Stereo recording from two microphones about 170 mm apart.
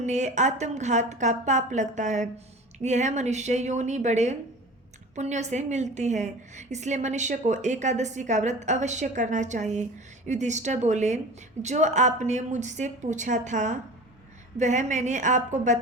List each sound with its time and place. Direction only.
0.0 s a woman's voice: 45° right (ahead or behind)